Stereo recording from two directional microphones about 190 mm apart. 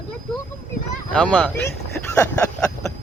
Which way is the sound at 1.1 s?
5° left (ahead or behind).